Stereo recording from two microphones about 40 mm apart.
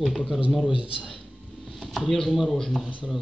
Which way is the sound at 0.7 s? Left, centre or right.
Right.